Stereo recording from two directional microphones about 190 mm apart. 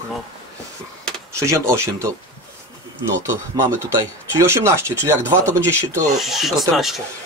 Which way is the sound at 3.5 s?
15° right (ahead or behind).